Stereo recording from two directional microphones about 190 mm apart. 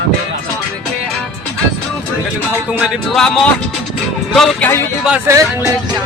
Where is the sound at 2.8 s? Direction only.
Centre (ahead or behind).